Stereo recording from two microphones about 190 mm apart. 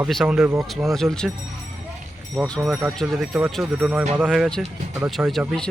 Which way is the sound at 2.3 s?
Centre (ahead or behind).